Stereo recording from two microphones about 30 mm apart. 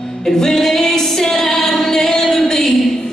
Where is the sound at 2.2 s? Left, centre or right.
Centre.